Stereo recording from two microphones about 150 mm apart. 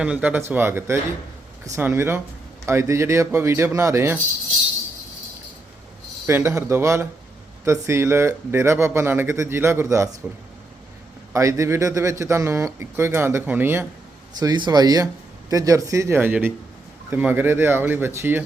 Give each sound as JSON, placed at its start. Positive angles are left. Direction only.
{"t": 0.0, "sound": "speech", "side_deg": -10}
{"t": 6.2, "sound": "speech", "side_deg": -20}
{"t": 11.3, "sound": "speech", "side_deg": -20}
{"t": 14.3, "sound": "speech", "side_deg": -30}